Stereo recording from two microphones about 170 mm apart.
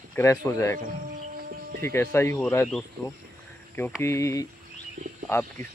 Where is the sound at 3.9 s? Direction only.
15° left (ahead or behind).